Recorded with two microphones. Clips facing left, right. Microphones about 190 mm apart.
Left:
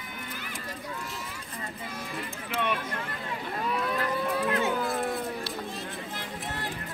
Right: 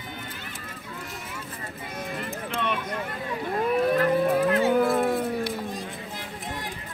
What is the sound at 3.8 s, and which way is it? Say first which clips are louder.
Cattle: right 10 dB; 50° right (ahead or behind).